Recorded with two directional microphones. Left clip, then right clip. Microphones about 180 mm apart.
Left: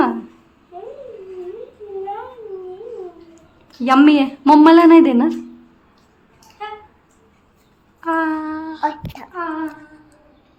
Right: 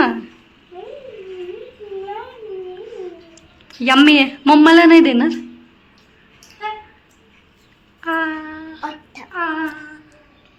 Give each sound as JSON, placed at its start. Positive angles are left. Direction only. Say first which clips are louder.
{"t": 3.8, "sound": "speech", "louder": "right 1 dB", "side_deg": 10}
{"t": 8.0, "sound": "a sound", "louder": "left 1 dB", "side_deg": 25}
{"t": 9.3, "sound": "female singing", "louder": "right 3 dB", "side_deg": 0}